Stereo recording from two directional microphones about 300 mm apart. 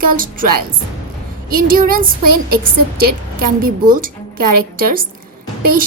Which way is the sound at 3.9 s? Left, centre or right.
Right.